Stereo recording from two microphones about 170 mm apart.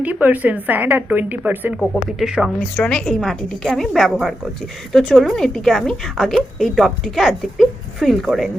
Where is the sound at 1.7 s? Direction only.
Centre (ahead or behind).